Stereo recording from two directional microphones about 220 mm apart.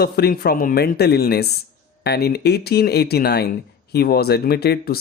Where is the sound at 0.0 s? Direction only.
45° left (ahead or behind).